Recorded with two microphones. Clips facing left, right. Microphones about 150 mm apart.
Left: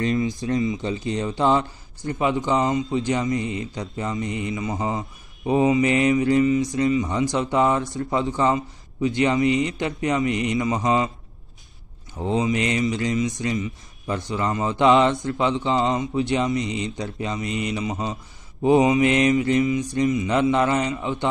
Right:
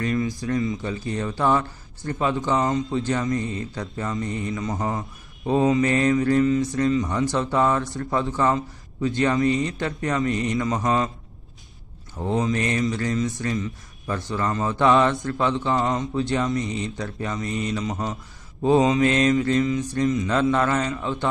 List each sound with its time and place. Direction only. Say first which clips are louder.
0.0 s speech: left 2 dB; 25° left (ahead or behind)
12.3 s speech: left 1 dB; 15° left (ahead or behind)